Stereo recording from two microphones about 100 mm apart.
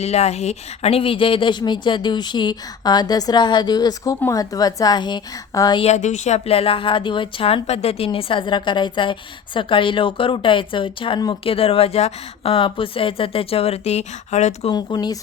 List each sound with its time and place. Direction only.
0.0 s a woman's voice: 90° left; by 5.8 s 45° left (ahead or behind)
6.3 s a woman's voice: 85° left; by 11.2 s 60° left (ahead or behind)
11.4 s a woman's voice: 70° left (ahead or behind); by 14.0 s 85° left
14.7 s speech: 45° left (ahead or behind)